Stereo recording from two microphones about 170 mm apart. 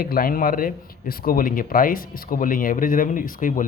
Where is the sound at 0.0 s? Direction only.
60° left (ahead or behind).